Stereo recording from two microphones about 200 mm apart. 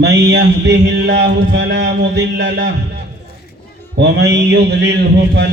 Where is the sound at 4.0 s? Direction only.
60° right (ahead or behind).